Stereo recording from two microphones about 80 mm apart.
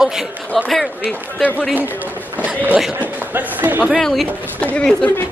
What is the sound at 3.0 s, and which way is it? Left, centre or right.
Speech, right.